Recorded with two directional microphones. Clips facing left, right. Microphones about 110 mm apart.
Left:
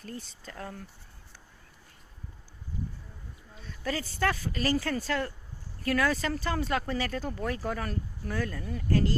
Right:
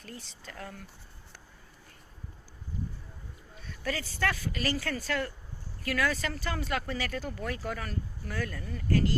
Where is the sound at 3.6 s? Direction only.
30° left (ahead or behind).